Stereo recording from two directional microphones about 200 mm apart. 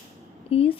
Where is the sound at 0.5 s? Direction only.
30° left (ahead or behind).